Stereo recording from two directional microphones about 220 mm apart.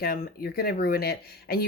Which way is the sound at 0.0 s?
40° left (ahead or behind).